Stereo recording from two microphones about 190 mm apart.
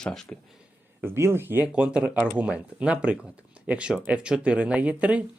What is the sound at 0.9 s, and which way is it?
Speech, 10° right (ahead or behind).